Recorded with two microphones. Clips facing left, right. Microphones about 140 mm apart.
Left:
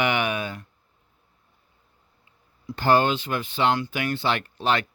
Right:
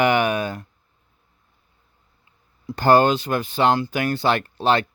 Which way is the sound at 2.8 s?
45° right (ahead or behind).